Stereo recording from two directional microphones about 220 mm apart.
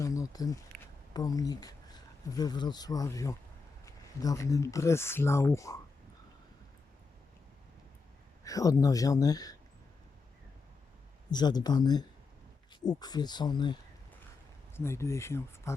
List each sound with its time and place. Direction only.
0.0 s a sound: 15° left (ahead or behind)
1.1 s speech: 15° left (ahead or behind)
8.4 s speech: 15° left (ahead or behind)
11.3 s speech: 20° left (ahead or behind)
14.8 s speech: 10° left (ahead or behind)